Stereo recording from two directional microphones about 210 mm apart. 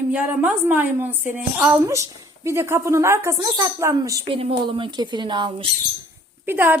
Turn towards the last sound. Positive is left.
turn(degrees=-10)  # may be behind; listen again after turning